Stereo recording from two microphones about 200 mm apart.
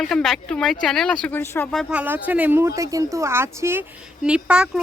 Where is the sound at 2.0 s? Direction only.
10° right (ahead or behind).